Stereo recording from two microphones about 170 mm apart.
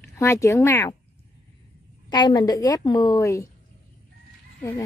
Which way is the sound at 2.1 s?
25° left (ahead or behind).